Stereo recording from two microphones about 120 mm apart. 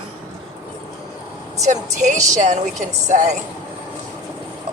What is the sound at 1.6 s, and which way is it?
A woman's voice, 85° right.